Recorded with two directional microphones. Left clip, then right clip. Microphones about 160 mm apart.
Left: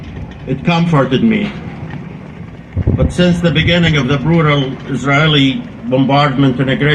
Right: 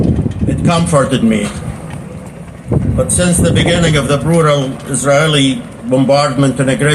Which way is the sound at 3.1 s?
50° right (ahead or behind).